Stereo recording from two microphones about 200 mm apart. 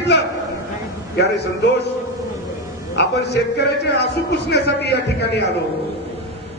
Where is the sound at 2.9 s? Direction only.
55° left (ahead or behind).